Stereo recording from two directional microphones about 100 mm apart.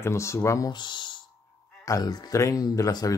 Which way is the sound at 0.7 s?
50° left (ahead or behind).